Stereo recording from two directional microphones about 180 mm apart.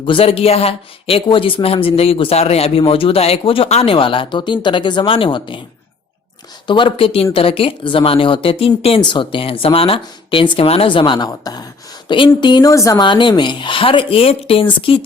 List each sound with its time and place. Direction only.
0.0 s speech: 30° left (ahead or behind)
6.7 s speech: 25° left (ahead or behind)